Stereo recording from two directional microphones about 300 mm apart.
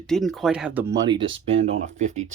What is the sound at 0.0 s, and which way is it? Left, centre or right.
Speech, centre.